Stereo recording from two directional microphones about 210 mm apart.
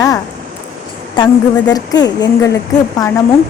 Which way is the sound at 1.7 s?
20° left (ahead or behind).